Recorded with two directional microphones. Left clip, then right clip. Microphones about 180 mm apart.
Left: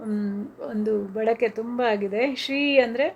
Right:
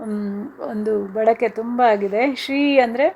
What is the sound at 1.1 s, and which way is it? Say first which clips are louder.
Speech: right 7 dB; 5° right (ahead or behind).